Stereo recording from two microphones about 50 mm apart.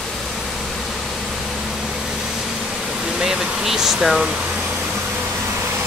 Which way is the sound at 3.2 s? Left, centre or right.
Centre.